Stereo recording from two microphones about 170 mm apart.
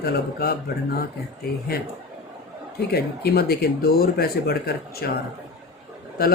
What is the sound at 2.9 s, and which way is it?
A man's voice, 70° left (ahead or behind).